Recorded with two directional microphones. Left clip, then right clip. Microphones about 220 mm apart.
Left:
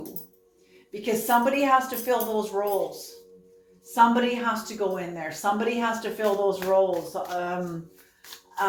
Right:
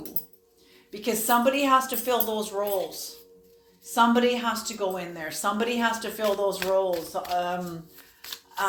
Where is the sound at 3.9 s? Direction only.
35° right (ahead or behind).